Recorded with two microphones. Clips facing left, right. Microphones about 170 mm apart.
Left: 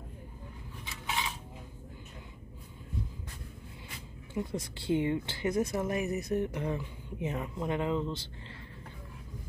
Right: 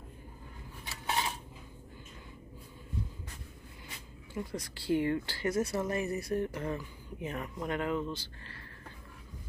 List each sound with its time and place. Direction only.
1.0 s cutlery: 40° right (ahead or behind)
4.3 s speech: 20° left (ahead or behind)